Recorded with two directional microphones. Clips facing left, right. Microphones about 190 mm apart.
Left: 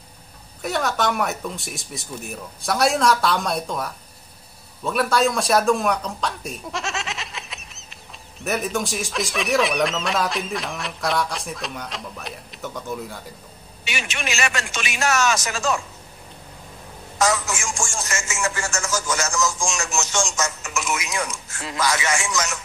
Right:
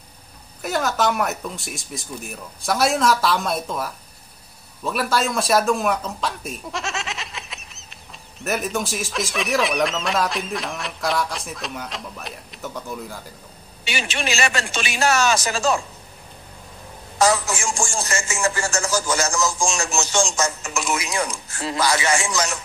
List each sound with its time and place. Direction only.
0.6 s a man's voice: centre (ahead or behind)
13.8 s speech: 30° right (ahead or behind)
17.2 s speech: 35° right (ahead or behind)